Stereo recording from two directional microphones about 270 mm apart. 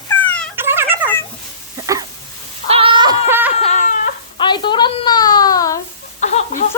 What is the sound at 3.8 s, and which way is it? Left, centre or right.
Baby cry, left.